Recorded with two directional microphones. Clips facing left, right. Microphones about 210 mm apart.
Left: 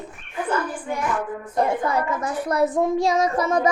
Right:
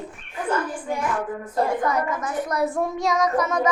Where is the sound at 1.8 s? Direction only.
30° left (ahead or behind).